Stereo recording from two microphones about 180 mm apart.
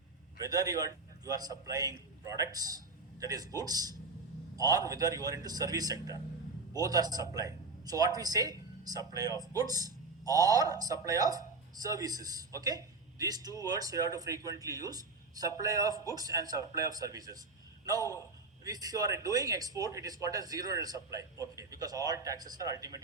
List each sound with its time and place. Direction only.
0.3 s speech: 20° right (ahead or behind)